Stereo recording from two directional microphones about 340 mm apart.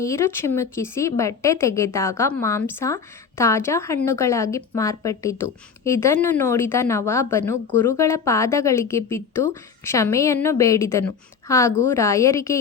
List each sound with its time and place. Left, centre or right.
0.0 s speech: centre